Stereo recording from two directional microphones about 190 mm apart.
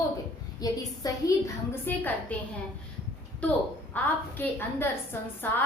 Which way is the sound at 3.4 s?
10° left (ahead or behind).